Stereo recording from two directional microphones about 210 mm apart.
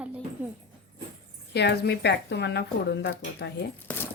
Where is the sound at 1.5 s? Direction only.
55° left (ahead or behind).